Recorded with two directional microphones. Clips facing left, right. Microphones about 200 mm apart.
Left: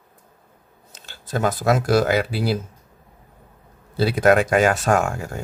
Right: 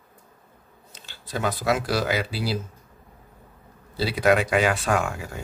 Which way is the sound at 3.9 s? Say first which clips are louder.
Left 4 dB; 50° left (ahead or behind).